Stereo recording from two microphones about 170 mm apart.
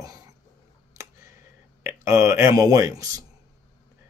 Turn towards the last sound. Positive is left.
turn(degrees=-20)  # may be behind; listen again after turning